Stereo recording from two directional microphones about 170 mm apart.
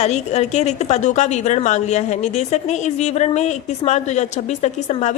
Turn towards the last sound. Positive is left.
turn(degrees=45)  # may be behind; listen again after turning